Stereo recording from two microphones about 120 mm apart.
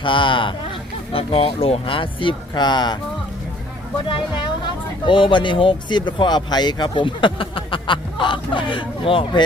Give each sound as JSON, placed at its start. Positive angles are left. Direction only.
{"t": 0.0, "sound": "speech", "side_deg": 45}
{"t": 4.1, "sound": "speech", "side_deg": 40}